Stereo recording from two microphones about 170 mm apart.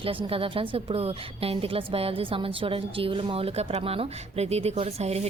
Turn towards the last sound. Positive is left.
turn(degrees=-40)  # may be behind; listen again after turning